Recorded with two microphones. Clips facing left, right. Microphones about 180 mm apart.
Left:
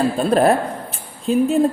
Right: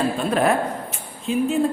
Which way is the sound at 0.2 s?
35° left (ahead or behind).